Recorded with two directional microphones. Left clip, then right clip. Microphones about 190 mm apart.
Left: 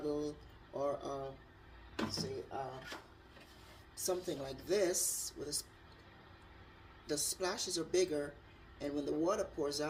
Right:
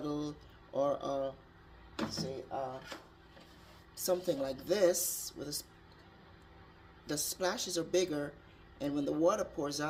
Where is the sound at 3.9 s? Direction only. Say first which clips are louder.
Right 6 dB; 50° right (ahead or behind).